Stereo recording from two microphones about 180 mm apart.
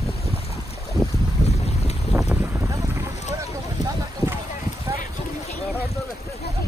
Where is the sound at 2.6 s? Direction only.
15° right (ahead or behind).